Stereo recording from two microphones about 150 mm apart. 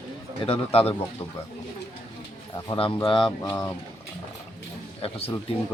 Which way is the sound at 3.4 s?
20° left (ahead or behind).